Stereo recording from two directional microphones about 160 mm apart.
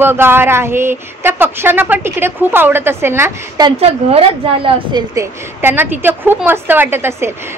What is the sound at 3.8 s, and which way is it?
A woman's voice, 35° right (ahead or behind).